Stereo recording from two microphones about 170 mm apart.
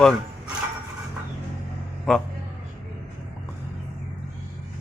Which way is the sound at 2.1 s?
Centre (ahead or behind).